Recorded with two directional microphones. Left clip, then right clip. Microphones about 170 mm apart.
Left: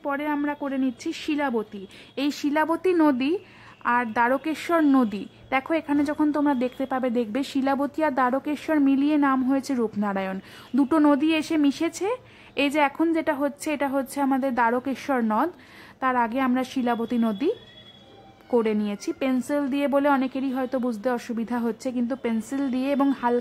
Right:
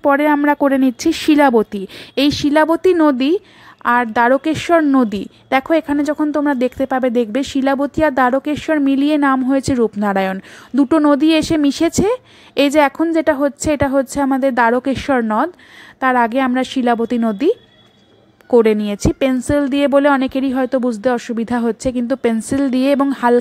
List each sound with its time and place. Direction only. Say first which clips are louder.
0.0 s a woman's voice: right 14 dB; 45° right (ahead or behind)